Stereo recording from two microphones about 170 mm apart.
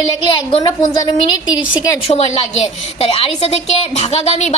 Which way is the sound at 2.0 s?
35° left (ahead or behind).